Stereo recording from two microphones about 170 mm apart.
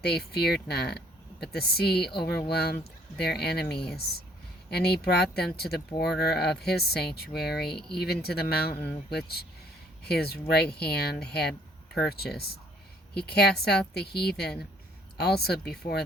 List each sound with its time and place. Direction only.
0.0 s speech: 70° left (ahead or behind)